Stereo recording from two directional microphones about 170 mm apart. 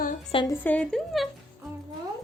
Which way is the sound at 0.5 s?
10° left (ahead or behind).